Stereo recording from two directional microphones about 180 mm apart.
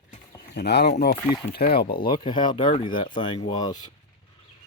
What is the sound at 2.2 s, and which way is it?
Speech, 25° left (ahead or behind).